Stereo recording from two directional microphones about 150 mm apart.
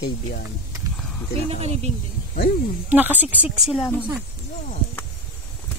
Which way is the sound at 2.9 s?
10° right (ahead or behind).